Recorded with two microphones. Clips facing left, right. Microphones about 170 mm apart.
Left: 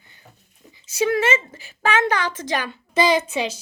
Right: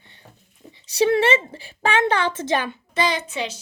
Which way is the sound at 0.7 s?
30° right (ahead or behind).